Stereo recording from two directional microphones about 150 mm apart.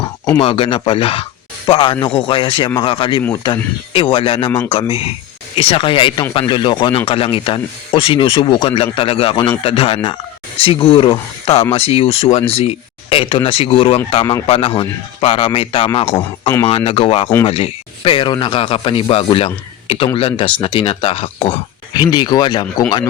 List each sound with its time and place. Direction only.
0.3 s speech: 35° left (ahead or behind)